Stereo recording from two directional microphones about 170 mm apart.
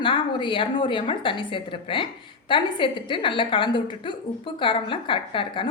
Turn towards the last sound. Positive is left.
turn(degrees=30)  # may be behind; listen again after turning